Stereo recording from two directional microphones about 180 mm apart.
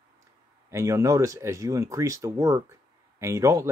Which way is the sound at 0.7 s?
15° right (ahead or behind).